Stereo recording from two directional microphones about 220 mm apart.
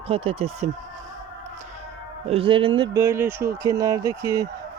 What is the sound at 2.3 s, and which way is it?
Speech, 25° right (ahead or behind).